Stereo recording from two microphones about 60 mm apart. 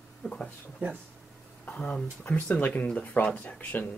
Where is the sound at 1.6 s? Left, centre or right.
Left.